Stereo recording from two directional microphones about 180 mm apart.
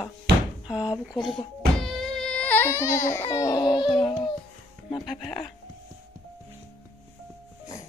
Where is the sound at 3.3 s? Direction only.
20° left (ahead or behind).